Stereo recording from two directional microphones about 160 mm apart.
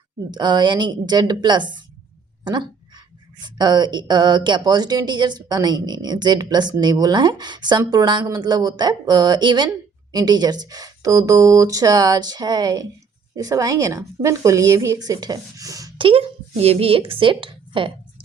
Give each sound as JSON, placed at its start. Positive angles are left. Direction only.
{"t": 0.3, "sound": "speech", "side_deg": -25}
{"t": 2.4, "sound": "a sound", "side_deg": -30}
{"t": 3.4, "sound": "speech", "side_deg": -25}
{"t": 16.0, "sound": "a woman's voice", "side_deg": -35}